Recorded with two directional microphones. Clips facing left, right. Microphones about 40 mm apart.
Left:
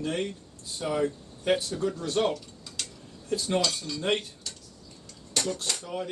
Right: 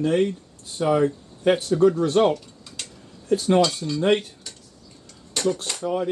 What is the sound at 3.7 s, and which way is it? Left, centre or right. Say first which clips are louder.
Speech: right 6 dB; centre.